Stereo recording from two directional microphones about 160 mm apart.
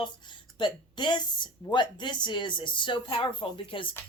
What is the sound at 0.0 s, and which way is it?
A woman's voice, 30° left (ahead or behind).